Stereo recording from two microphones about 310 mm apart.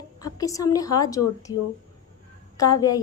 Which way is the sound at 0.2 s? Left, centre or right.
Centre.